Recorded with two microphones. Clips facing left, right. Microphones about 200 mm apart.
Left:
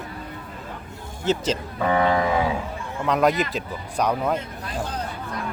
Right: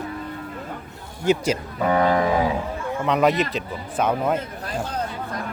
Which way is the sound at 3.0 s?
Centre (ahead or behind).